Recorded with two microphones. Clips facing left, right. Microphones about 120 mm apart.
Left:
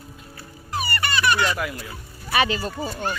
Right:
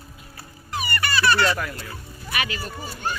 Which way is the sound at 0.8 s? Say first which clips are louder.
Right 1 dB; 25° left (ahead or behind).